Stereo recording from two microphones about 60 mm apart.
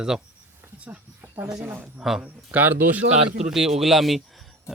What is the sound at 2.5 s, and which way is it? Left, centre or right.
Speech, right.